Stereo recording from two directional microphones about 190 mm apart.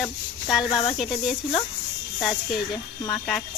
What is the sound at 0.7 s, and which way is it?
Speech, 30° left (ahead or behind).